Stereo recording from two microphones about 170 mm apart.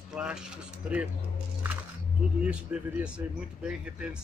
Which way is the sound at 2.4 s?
5° right (ahead or behind).